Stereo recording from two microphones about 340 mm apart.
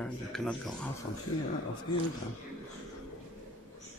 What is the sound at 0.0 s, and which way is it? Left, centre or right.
Speech, centre.